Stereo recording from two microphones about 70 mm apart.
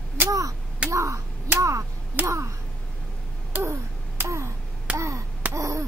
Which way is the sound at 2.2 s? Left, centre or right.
Right.